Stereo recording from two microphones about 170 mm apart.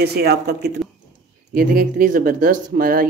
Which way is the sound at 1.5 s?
60° right (ahead or behind).